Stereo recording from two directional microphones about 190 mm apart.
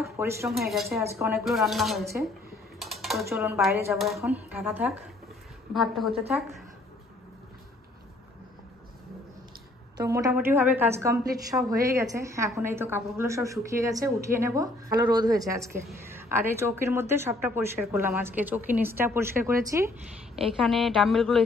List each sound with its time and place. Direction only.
0.0 s a sound: 15° right (ahead or behind)
0.5 s a woman's voice: centre (ahead or behind)
2.8 s typing: centre (ahead or behind)
3.3 s speech: 15° right (ahead or behind)
3.9 s a woman's voice: centre (ahead or behind)
10.0 s speech: 15° right (ahead or behind)
20.5 s a woman's voice: centre (ahead or behind)